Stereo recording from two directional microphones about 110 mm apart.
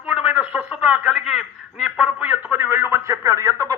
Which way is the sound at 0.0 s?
10° right (ahead or behind).